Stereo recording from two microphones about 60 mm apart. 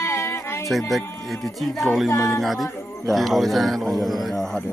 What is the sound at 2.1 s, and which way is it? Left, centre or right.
A capella, left.